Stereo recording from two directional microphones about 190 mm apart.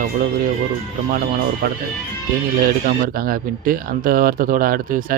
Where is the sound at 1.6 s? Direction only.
50° right (ahead or behind).